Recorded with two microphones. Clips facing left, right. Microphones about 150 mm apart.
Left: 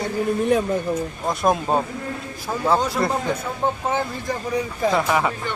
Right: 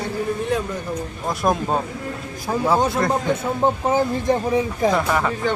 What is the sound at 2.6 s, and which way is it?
Speech, 20° right (ahead or behind).